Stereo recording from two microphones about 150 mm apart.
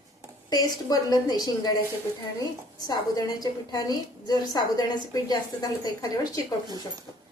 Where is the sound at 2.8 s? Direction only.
25° left (ahead or behind).